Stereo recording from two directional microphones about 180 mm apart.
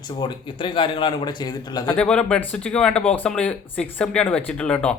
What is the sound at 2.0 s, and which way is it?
Speech, 5° left (ahead or behind).